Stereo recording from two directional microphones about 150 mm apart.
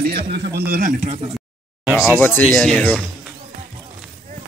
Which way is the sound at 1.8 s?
5° right (ahead or behind).